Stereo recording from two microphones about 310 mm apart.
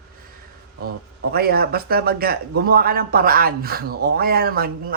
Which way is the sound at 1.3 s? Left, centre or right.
Right.